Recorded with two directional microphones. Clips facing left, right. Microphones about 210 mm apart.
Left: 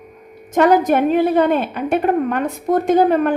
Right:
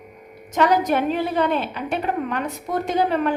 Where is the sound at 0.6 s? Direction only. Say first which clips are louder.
Left 6 dB; 50° left (ahead or behind).